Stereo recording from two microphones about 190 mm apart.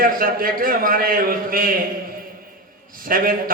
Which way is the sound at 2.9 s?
45° right (ahead or behind).